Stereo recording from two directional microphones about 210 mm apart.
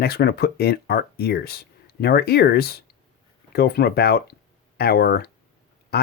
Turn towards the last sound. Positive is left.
turn(degrees=50)  # may be behind; listen again after turning